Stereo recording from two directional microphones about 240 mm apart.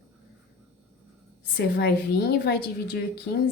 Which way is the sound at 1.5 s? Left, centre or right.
Left.